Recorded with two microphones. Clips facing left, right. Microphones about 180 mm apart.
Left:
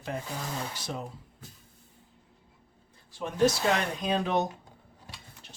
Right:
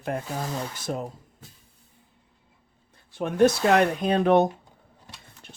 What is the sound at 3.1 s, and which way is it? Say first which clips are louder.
Speech: right 5 dB; 55° right (ahead or behind).